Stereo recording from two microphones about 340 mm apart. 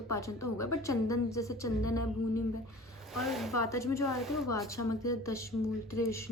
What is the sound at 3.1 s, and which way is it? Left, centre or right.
Speech, centre.